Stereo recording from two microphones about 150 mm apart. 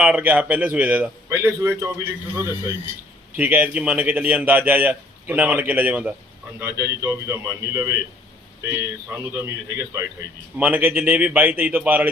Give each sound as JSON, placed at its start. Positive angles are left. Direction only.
{"t": 0.0, "sound": "a man's voice", "side_deg": -10}
{"t": 3.3, "sound": "a man's voice", "side_deg": -10}